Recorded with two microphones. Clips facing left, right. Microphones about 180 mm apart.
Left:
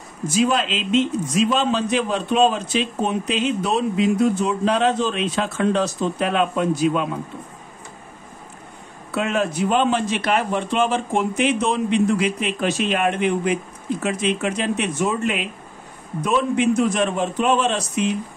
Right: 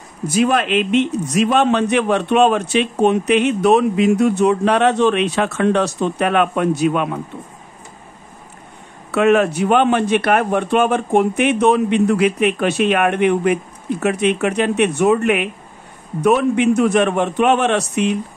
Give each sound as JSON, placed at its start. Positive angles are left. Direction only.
{"t": 0.3, "sound": "a man's voice", "side_deg": -60}
{"t": 9.1, "sound": "a man's voice", "side_deg": -70}